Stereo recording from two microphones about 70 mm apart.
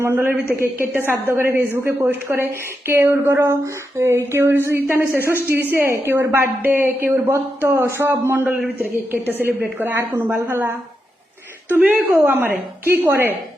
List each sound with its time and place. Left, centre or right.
0.0 s a woman's voice: right